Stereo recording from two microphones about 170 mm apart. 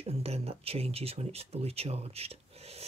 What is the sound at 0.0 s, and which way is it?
Speech, 35° right (ahead or behind).